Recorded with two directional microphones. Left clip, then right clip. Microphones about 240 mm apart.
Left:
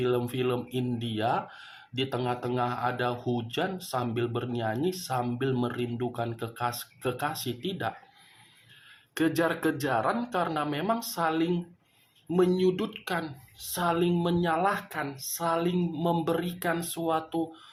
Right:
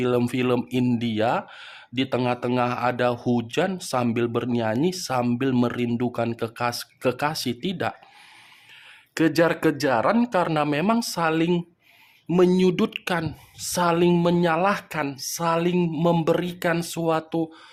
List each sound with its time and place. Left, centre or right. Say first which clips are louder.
0.0 s speech: right 5 dB; right
9.1 s speech: right 7 dB; right